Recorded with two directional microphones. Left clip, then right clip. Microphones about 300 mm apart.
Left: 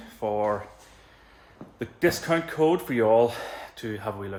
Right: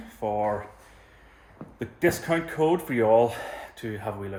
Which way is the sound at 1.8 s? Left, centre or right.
Centre.